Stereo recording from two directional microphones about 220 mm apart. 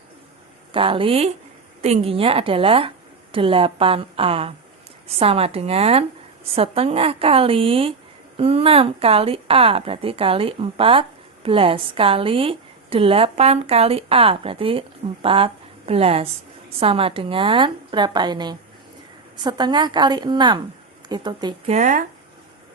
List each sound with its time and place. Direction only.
0.7 s a woman's voice: 25° right (ahead or behind)
21.8 s speech: 35° right (ahead or behind)